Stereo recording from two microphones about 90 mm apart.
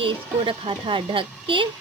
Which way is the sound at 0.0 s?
85° right.